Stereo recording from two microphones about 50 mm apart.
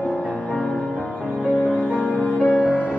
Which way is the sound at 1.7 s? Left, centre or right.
Left.